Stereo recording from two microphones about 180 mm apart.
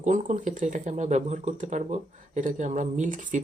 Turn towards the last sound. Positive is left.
turn(degrees=-45)  # may be behind; listen again after turning